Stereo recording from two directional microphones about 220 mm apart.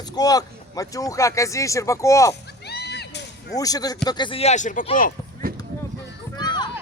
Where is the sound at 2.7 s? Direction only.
50° left (ahead or behind).